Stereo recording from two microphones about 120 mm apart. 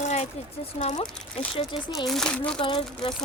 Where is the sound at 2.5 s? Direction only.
45° left (ahead or behind).